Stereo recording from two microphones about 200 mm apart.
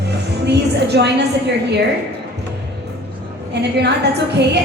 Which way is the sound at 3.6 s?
55° right (ahead or behind).